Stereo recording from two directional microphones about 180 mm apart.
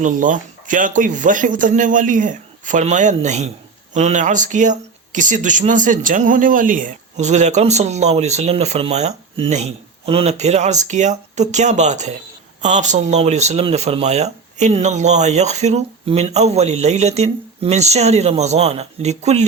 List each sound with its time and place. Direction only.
0.0 s speech: 45° right (ahead or behind)